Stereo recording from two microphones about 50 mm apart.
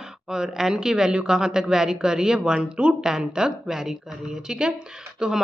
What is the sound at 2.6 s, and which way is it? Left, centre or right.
Speech, right.